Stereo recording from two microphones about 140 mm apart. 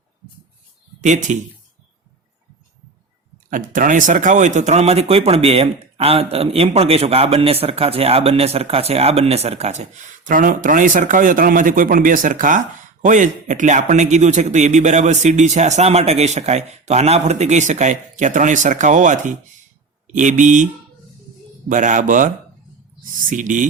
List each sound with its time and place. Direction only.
1.0 s a man's voice: 60° right (ahead or behind)
3.5 s a man's voice: 70° right (ahead or behind)
21.7 s speech: 65° right (ahead or behind)